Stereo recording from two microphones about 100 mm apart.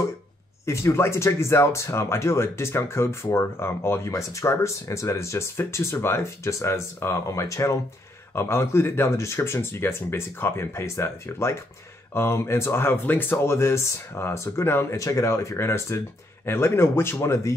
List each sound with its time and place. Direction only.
0.7 s speech: 25° left (ahead or behind)